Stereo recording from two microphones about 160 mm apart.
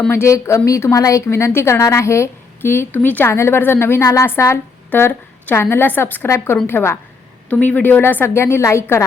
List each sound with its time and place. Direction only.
0.1 s a woman's voice: 15° left (ahead or behind)